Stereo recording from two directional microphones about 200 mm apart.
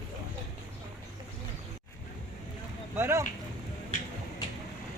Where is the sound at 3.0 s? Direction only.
15° right (ahead or behind).